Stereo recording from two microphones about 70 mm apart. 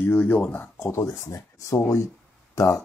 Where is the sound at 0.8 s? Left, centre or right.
Left.